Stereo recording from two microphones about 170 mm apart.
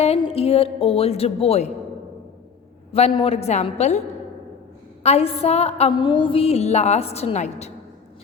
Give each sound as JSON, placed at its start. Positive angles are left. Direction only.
{"t": 0.2, "sound": "a woman's voice", "side_deg": 35}
{"t": 2.9, "sound": "a woman's voice", "side_deg": 35}
{"t": 5.0, "sound": "a woman's voice", "side_deg": 35}